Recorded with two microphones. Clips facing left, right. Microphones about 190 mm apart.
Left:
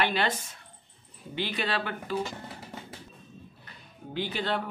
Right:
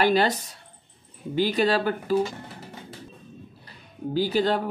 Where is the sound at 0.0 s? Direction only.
40° right (ahead or behind).